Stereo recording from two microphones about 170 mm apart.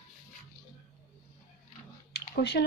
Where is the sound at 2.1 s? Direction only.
75° left (ahead or behind).